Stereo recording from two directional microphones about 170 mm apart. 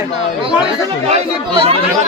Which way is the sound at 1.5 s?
35° right (ahead or behind).